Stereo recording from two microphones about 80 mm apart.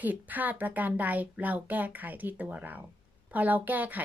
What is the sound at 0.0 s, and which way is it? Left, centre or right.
A woman's voice, right.